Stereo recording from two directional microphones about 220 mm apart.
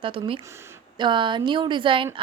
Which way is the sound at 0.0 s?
25° right (ahead or behind).